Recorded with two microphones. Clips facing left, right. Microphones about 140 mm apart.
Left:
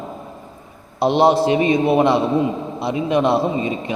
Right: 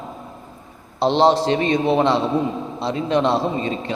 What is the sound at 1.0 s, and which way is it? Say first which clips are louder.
A man's voice: left 1 dB; 10° left (ahead or behind).